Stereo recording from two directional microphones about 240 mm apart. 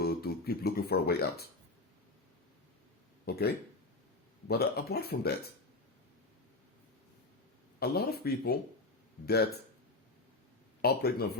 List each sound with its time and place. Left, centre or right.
0.0 s speech: left
3.2 s speech: left
7.8 s speech: left
10.8 s speech: left